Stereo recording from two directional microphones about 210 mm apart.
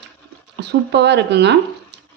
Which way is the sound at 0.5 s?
55° right (ahead or behind).